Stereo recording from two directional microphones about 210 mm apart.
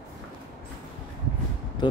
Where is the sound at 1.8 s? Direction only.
20° left (ahead or behind).